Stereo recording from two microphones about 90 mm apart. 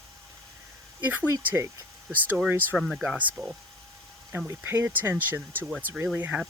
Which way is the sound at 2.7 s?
Centre (ahead or behind).